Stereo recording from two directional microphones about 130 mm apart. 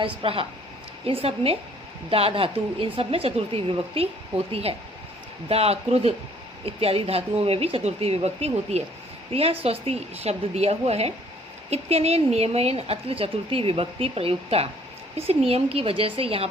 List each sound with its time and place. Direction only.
0.0 s speech: 45° right (ahead or behind)
5.5 s speech: 50° right (ahead or behind)